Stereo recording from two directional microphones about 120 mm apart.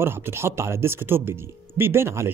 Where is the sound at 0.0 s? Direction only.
20° right (ahead or behind).